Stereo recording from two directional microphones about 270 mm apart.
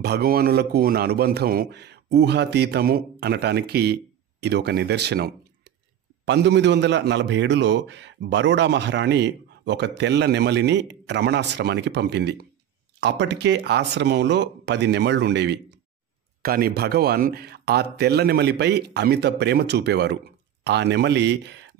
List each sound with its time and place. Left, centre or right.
0.0 s a man's voice: right